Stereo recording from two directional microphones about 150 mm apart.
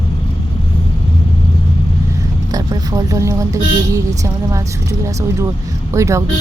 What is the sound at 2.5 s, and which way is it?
Vehicle, 25° right (ahead or behind).